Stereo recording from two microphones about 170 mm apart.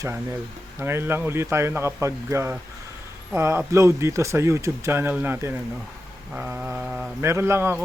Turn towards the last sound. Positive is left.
turn(degrees=-15)  # may be behind; listen again after turning